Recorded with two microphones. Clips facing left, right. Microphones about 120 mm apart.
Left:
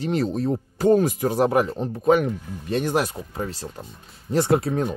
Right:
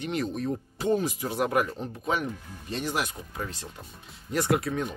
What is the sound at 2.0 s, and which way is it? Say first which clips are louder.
Speech: left 11 dB; 55° left (ahead or behind).